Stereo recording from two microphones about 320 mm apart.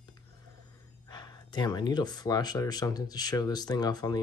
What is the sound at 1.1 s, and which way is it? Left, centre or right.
Speech, centre.